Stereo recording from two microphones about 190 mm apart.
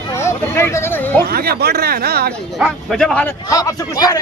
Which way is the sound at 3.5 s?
20° left (ahead or behind).